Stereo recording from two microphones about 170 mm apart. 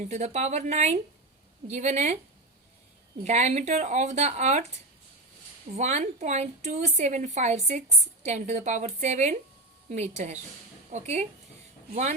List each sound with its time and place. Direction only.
0.0 s a woman's voice: 40° right (ahead or behind)
3.2 s a woman's voice: 40° right (ahead or behind)
5.7 s a woman's voice: 40° right (ahead or behind)